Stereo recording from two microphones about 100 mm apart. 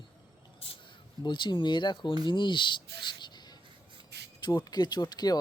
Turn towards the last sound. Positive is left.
turn(degrees=40)  # may be behind; listen again after turning